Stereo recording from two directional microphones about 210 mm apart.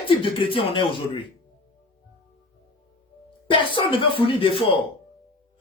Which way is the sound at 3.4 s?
25° left (ahead or behind).